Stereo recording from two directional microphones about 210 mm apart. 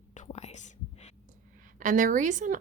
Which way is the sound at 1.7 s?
40° right (ahead or behind).